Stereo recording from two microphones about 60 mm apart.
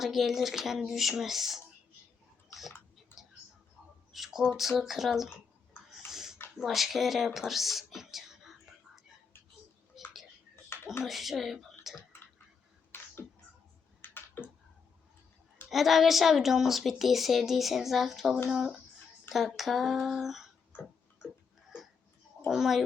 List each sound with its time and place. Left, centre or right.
0.0 s a woman's voice: centre
3.1 s a sound: left
4.1 s a woman's voice: centre
6.1 s a sound: centre
6.6 s a woman's voice: centre
9.9 s tick-tock: centre
11.0 s speech: centre
12.9 s a sound: left
14.0 s typing: left
15.7 s a woman's voice: centre
22.4 s a child's voice: centre